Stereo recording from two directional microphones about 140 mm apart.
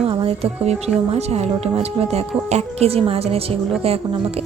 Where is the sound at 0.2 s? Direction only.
45° right (ahead or behind).